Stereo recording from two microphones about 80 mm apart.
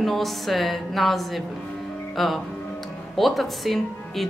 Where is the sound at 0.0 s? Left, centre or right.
Centre.